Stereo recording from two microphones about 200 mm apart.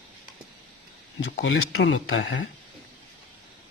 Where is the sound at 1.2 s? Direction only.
60° left (ahead or behind).